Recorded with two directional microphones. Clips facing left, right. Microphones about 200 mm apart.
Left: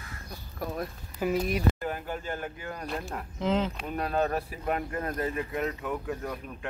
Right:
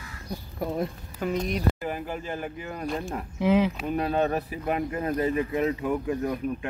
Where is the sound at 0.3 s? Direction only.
25° right (ahead or behind).